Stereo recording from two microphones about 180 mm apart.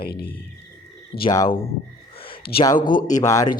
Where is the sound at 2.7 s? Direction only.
50° left (ahead or behind).